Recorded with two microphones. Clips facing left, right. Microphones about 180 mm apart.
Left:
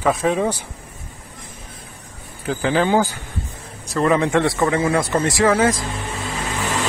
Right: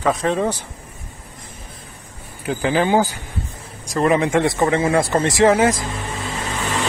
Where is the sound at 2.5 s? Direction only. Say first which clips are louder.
Even; 15° right (ahead or behind).